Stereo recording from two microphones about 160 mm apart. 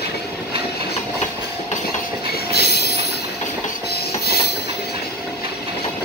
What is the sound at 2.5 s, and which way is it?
Train, 80° left.